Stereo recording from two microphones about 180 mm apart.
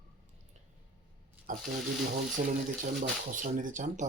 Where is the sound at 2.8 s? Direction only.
45° right (ahead or behind).